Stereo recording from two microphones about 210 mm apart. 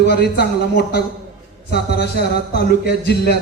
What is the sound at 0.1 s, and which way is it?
Speech, 50° left (ahead or behind).